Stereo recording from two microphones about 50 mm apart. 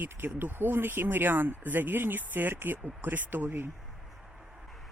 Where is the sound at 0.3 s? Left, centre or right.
Right.